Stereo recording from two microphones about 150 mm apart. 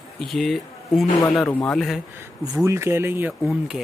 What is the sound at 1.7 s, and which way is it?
Speech, centre (ahead or behind).